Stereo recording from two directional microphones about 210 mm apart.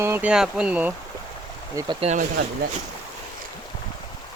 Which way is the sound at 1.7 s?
25° right (ahead or behind).